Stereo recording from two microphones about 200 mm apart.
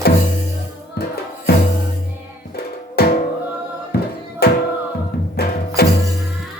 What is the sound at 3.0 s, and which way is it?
Music, 55° left (ahead or behind).